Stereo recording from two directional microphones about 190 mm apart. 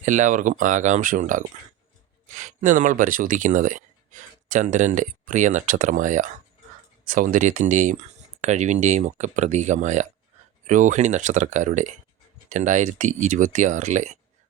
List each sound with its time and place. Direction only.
0.0 s speech: 40° right (ahead or behind)